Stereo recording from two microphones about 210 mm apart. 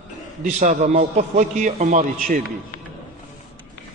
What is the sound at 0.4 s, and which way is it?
A man's voice, 35° right (ahead or behind).